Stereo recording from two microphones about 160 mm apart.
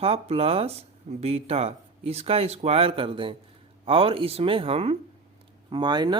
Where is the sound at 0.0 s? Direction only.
40° right (ahead or behind).